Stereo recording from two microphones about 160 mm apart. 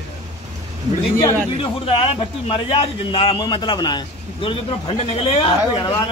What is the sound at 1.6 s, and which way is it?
A man's voice, 35° left (ahead or behind).